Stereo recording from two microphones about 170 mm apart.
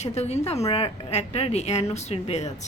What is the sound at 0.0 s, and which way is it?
A woman's voice, 40° left (ahead or behind).